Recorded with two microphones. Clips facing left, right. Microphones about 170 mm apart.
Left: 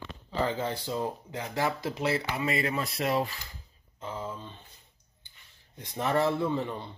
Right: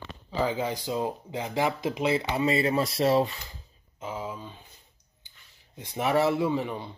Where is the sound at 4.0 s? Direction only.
10° right (ahead or behind).